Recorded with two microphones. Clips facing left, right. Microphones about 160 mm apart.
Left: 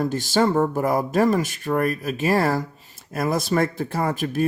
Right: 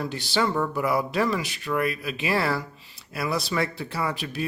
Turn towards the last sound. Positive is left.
turn(degrees=45)  # may be behind; listen again after turning